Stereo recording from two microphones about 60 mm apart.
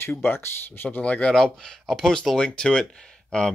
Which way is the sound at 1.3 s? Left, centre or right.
Centre.